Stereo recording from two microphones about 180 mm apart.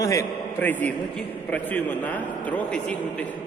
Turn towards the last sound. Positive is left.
turn(degrees=5)  # may be behind; listen again after turning